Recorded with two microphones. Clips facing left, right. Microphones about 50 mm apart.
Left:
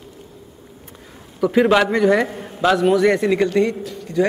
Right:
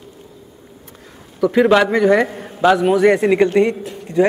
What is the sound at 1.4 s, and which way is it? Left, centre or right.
Speech, centre.